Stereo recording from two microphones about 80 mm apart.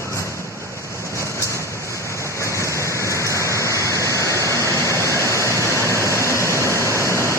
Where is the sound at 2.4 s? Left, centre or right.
Left.